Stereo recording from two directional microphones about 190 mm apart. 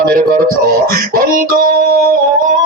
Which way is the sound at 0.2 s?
50° right (ahead or behind).